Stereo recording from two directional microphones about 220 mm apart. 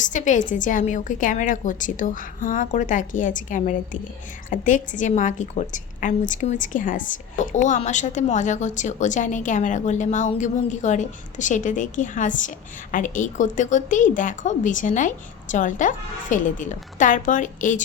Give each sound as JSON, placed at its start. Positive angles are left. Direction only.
{"t": 0.0, "sound": "a woman's voice", "side_deg": 35}